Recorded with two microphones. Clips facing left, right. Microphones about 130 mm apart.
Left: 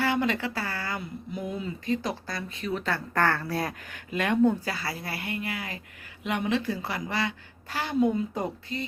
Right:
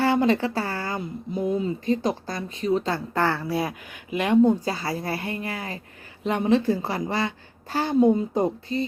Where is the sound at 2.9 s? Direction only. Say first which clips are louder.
Right 2 dB; 15° right (ahead or behind).